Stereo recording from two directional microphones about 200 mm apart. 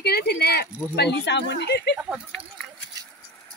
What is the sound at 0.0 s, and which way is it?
Speech, 55° left (ahead or behind).